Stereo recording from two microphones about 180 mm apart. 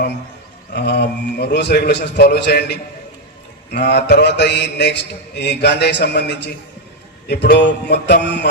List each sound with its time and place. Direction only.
0.7 s mantra: 65° left (ahead or behind)